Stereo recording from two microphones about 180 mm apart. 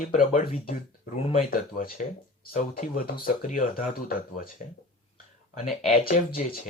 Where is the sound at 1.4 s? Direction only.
55° left (ahead or behind).